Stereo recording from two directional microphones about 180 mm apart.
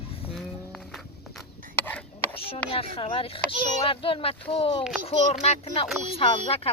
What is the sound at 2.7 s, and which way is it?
Speech, 30° left (ahead or behind).